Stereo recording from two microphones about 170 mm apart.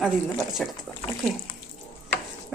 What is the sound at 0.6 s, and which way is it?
Speech, centre (ahead or behind).